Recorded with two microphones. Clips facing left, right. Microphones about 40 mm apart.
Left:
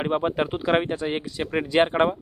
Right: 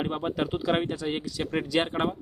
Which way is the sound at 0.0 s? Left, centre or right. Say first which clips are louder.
Left 5 dB; left.